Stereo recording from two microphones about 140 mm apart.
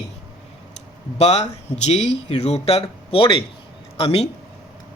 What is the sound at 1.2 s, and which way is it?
Speech, 50° left (ahead or behind).